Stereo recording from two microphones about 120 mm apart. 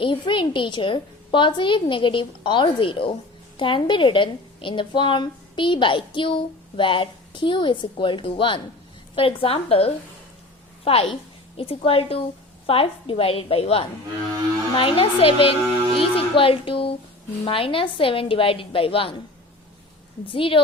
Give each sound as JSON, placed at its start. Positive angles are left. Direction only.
{"t": 0.0, "sound": "a woman's voice", "side_deg": 45}
{"t": 20.2, "sound": "a woman's voice", "side_deg": 45}